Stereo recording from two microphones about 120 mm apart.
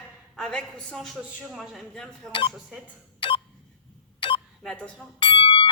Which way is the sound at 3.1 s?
40° left (ahead or behind).